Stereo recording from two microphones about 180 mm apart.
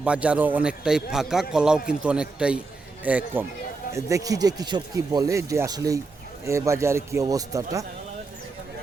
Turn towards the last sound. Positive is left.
turn(degrees=-20)  # may be behind; listen again after turning